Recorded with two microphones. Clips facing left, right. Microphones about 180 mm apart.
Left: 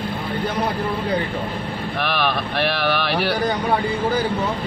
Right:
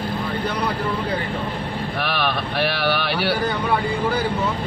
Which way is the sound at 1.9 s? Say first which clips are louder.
Left 2 dB; centre (ahead or behind).